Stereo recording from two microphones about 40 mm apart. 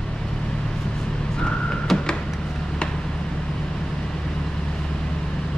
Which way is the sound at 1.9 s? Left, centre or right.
Left.